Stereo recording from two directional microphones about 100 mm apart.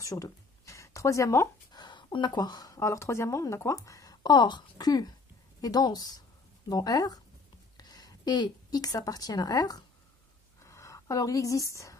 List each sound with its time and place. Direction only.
0.0 s speech: 35° left (ahead or behind)
1.7 s a woman's voice: 45° left (ahead or behind)
10.6 s a sound: 30° left (ahead or behind)